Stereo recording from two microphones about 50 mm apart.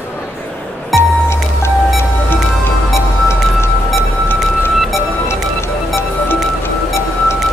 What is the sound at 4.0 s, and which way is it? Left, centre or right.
Music, left.